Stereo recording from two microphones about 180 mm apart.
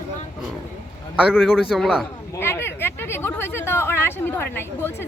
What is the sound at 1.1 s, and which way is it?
Speech, 5° right (ahead or behind).